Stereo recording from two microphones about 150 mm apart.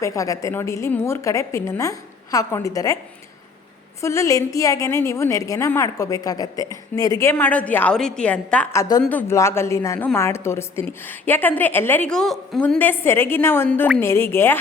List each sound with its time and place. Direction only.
0.0 s a woman's voice: 20° left (ahead or behind)
4.0 s a woman's voice: 20° left (ahead or behind)
8.7 s a woman's voice: 20° left (ahead or behind)